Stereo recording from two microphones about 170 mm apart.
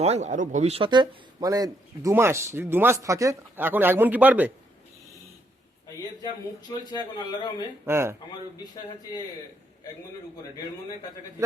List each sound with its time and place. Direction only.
0.0 s a man's voice: 40° right (ahead or behind); by 4.5 s 10° right (ahead or behind)
6.9 s speech: 25° left (ahead or behind)
7.9 s a man's voice: 15° right (ahead or behind)
8.5 s speech: 25° left (ahead or behind)